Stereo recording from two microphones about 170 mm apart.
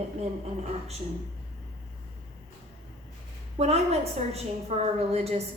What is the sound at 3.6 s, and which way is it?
A woman's voice, 40° right (ahead or behind).